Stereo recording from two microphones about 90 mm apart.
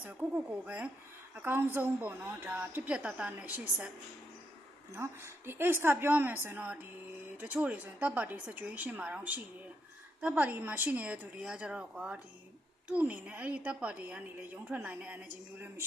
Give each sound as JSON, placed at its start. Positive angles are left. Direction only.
{"t": 0.0, "sound": "a woman's voice", "side_deg": -20}
{"t": 1.4, "sound": "a woman's voice", "side_deg": -25}
{"t": 4.9, "sound": "a woman's voice", "side_deg": -25}